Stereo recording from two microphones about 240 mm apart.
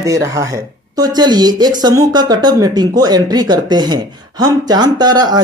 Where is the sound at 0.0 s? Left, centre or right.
Centre.